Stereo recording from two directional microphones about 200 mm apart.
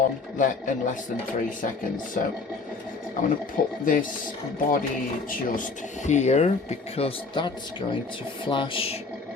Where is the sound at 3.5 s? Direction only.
45° left (ahead or behind).